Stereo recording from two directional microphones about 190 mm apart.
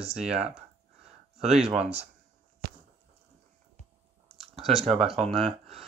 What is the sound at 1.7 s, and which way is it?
Speech, 35° right (ahead or behind).